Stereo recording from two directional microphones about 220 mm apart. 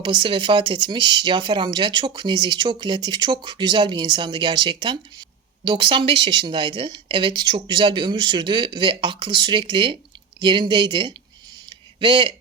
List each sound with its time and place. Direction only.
0.0 s speech: 20° right (ahead or behind)